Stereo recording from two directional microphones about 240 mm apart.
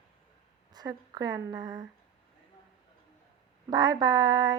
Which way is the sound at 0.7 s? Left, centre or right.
Centre.